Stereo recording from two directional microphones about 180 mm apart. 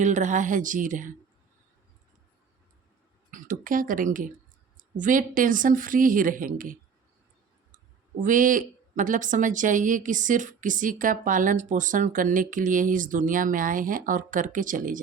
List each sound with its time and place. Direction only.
0.0 s a woman's voice: 45° right (ahead or behind)
3.3 s a woman's voice: 50° right (ahead or behind)
8.2 s a woman's voice: 50° right (ahead or behind)